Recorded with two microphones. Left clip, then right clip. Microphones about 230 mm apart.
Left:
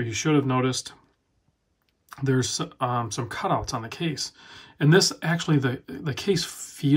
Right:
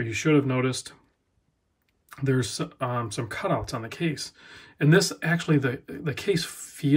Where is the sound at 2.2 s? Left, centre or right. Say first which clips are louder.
Left 1 dB; centre.